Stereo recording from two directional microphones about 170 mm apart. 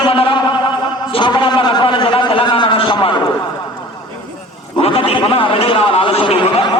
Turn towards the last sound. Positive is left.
turn(degrees=30)  # may be behind; listen again after turning